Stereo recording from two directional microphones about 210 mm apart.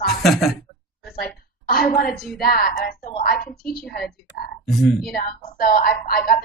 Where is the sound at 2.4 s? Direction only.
45° left (ahead or behind).